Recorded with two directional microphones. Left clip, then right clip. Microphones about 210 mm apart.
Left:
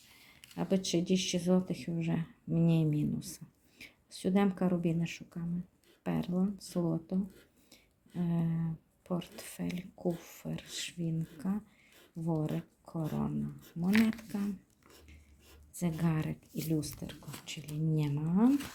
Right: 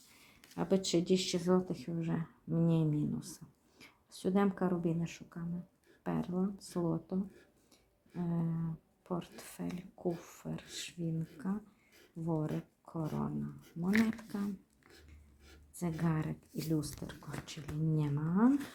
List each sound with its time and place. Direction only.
0.5 s speech: 10° left (ahead or behind)
7.7 s a sound: 20° left (ahead or behind)
9.0 s speech: 20° left (ahead or behind)
15.7 s speech: 20° left (ahead or behind)